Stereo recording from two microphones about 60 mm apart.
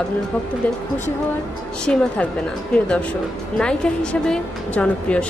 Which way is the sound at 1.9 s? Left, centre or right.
Centre.